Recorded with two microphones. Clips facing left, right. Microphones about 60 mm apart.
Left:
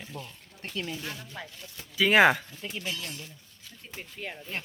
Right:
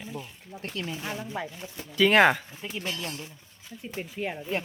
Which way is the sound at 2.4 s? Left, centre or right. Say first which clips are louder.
Right 2 dB; centre.